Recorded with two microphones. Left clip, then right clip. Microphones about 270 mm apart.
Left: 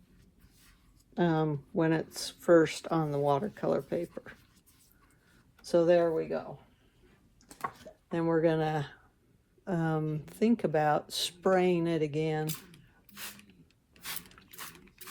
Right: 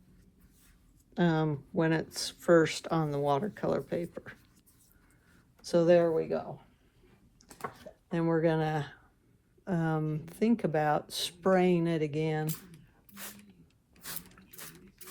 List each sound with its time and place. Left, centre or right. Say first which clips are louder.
1.1 s speech: left 1 dB; right
5.3 s a sound: left 1 dB; right
7.7 s chopping: left 1 dB; right
9.6 s speech: even; right
13.9 s a sound: left 4 dB; centre
14.3 s ratchet: left 3 dB; centre